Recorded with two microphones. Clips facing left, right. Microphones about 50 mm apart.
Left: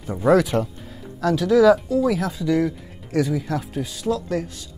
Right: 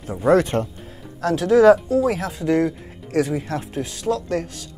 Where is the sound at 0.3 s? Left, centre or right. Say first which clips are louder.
Even; right.